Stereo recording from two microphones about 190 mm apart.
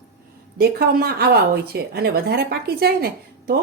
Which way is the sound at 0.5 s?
55° right (ahead or behind).